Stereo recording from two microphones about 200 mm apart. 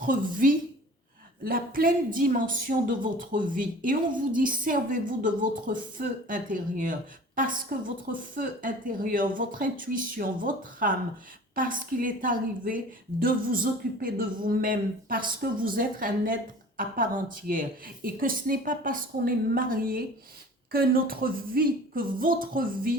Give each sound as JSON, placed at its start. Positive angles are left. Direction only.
{"t": 0.0, "sound": "a woman's voice", "side_deg": -40}